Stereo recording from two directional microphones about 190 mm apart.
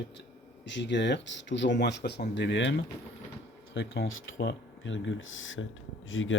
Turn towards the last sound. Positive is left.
turn(degrees=90)